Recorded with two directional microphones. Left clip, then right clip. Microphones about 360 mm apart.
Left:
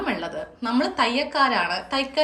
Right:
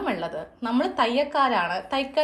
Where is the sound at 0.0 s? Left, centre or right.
Centre.